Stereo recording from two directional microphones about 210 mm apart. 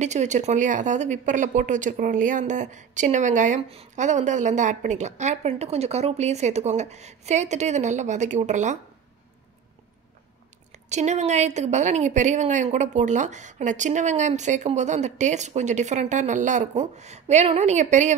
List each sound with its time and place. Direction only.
0.0 s speech: 35° right (ahead or behind)
10.9 s speech: 35° right (ahead or behind)